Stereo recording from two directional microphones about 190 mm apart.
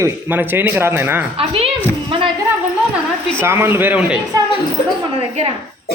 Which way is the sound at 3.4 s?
15° right (ahead or behind).